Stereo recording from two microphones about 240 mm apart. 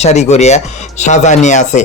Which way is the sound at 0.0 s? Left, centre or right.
Left.